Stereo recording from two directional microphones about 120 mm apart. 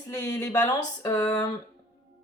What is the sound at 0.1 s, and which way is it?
Speech, 30° left (ahead or behind).